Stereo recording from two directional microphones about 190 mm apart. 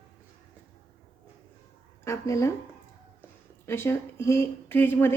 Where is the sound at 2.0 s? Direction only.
15° left (ahead or behind).